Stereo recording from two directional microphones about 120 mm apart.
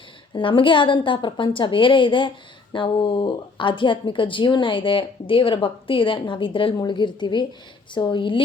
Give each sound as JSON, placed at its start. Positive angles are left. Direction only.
{"t": 0.3, "sound": "a woman's voice", "side_deg": 45}